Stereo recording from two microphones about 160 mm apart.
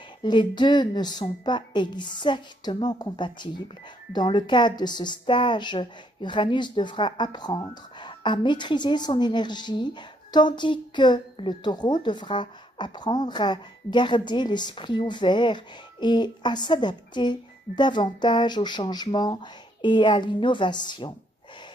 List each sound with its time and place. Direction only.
0.2 s a woman's voice: 30° left (ahead or behind)